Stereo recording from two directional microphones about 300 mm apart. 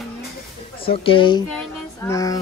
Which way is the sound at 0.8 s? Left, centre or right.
Centre.